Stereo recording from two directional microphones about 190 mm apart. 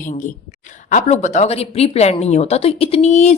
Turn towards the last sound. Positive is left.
turn(degrees=35)  # may be behind; listen again after turning